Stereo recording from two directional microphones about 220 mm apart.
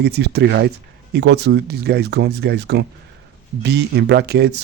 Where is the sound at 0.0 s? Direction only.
50° right (ahead or behind).